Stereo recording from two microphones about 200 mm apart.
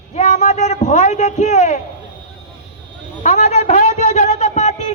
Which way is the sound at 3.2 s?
35° left (ahead or behind).